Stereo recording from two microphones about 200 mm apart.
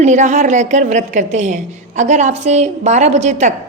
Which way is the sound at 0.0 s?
35° right (ahead or behind).